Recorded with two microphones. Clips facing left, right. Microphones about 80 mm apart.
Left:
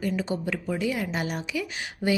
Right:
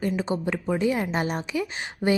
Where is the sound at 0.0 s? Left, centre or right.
Right.